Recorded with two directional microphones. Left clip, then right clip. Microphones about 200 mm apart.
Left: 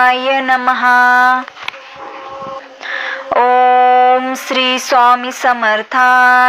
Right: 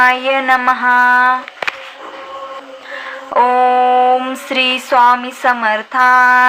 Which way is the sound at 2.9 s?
30° left (ahead or behind).